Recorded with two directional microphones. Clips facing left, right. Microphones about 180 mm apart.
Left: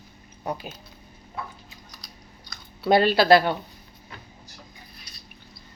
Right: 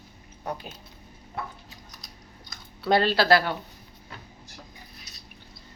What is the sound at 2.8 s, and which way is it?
Speech, 10° left (ahead or behind).